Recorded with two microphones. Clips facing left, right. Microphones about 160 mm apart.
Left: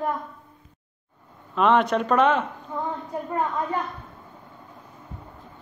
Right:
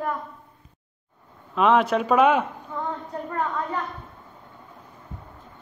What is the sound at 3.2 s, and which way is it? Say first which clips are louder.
Speech: left 1 dB; 20° left (ahead or behind).